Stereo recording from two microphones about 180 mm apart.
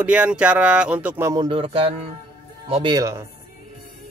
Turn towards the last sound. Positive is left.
turn(degrees=-20)  # may be behind; listen again after turning